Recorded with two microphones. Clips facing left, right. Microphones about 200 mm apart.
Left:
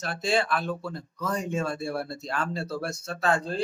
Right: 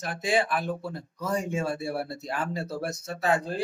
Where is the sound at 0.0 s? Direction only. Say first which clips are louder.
Even; 15° right (ahead or behind).